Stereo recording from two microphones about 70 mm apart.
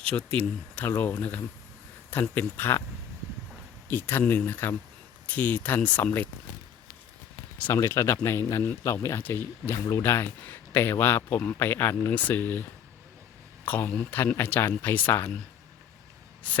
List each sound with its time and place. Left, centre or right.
0.0 s speech: centre; by 2.8 s left
3.8 s speech: left
7.7 s speech: left
13.7 s speech: left